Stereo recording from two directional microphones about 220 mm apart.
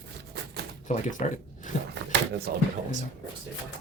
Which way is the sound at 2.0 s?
55° right (ahead or behind).